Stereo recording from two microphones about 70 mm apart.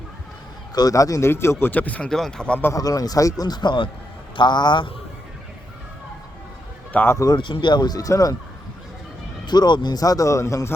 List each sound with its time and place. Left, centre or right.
0.8 s speech: left
1.3 s speech: left
1.7 s speech: left
2.0 s speech: centre
2.7 s a man's voice: left
6.9 s speech: left
7.3 s speech: left
9.5 s speech: left